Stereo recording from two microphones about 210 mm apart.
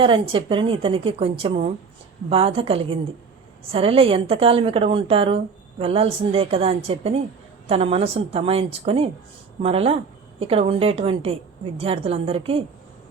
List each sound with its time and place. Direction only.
0.0 s a woman's voice: 25° right (ahead or behind)